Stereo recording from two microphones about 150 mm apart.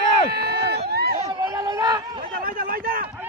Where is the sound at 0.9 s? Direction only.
90° right.